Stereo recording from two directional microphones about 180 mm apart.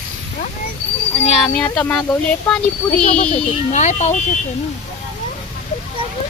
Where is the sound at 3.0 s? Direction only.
35° left (ahead or behind).